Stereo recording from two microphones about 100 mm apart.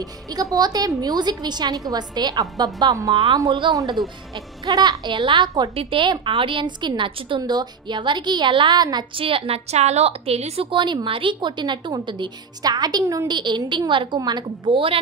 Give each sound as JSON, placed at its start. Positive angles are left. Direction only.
{"t": 0.0, "sound": "a woman's voice", "side_deg": -40}
{"t": 4.6, "sound": "a woman's voice", "side_deg": -45}
{"t": 9.2, "sound": "a woman's voice", "side_deg": -70}
{"t": 13.3, "sound": "a woman's voice", "side_deg": -50}